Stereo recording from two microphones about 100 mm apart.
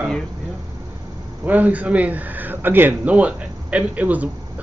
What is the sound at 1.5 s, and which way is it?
Speech, 15° right (ahead or behind).